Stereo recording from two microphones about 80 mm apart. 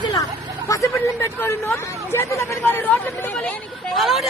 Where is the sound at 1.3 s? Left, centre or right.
Left.